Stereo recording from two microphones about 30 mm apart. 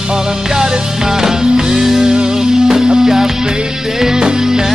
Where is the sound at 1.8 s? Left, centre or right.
Centre.